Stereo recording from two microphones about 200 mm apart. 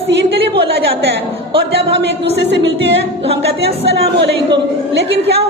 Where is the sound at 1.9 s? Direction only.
60° right (ahead or behind).